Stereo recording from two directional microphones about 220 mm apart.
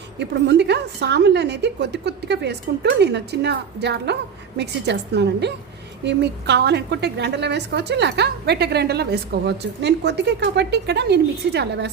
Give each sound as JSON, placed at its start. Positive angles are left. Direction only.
{"t": 0.2, "sound": "a woman's voice", "side_deg": -50}